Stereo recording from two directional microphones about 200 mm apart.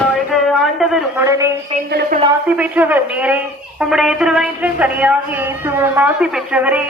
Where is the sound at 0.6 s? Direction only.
Centre (ahead or behind).